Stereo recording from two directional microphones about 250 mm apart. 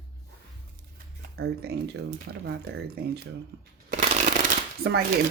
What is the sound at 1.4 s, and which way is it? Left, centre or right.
Speech, right.